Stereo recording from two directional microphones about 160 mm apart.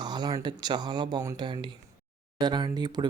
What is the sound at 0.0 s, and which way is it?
Speech, 25° right (ahead or behind).